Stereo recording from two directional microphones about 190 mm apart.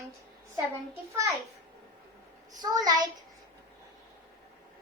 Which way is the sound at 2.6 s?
20° right (ahead or behind).